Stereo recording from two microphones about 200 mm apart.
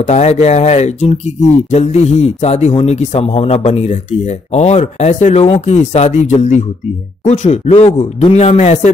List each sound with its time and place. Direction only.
0.0 s a man's voice: 35° left (ahead or behind)